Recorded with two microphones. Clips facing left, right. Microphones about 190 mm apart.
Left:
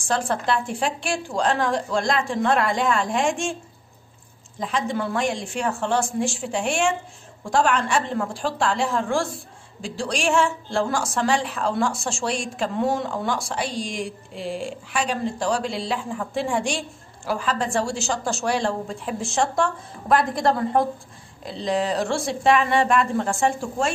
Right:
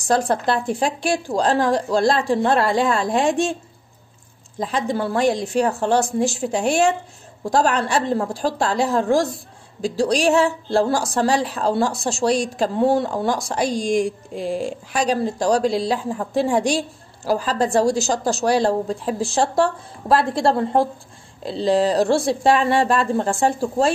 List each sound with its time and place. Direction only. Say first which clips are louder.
0.0 s a woman's voice: right 5 dB; 40° right (ahead or behind)
4.6 s a woman's voice: right 3 dB; 35° right (ahead or behind)